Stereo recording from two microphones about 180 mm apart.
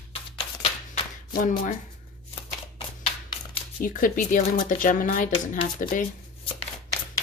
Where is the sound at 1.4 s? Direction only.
45° left (ahead or behind).